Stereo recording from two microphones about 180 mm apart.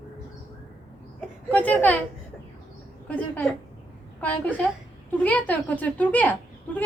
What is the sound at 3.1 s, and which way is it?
A woman's voice, 5° left (ahead or behind).